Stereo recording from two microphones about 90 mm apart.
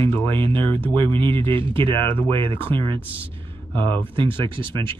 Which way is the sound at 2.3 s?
70° right (ahead or behind).